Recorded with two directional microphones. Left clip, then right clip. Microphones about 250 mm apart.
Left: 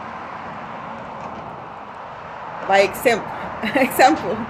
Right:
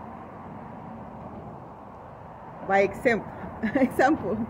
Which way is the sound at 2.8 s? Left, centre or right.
Left.